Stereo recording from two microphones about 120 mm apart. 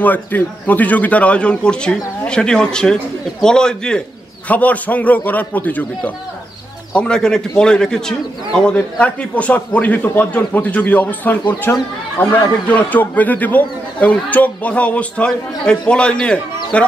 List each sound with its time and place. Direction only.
0.0 s speech: 15° left (ahead or behind)